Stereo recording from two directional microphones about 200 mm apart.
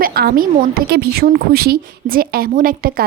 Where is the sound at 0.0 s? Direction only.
50° right (ahead or behind).